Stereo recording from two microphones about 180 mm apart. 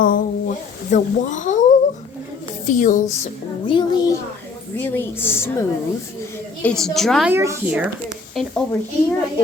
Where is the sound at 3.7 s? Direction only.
25° left (ahead or behind).